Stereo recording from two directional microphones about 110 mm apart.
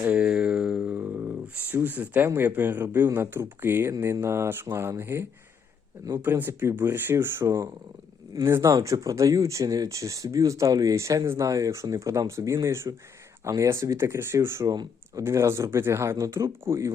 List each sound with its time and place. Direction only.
0.0 s speech: 10° right (ahead or behind)
6.2 s speech: 20° right (ahead or behind)
14.7 s speech: 35° right (ahead or behind)
15.2 s speech: 25° right (ahead or behind)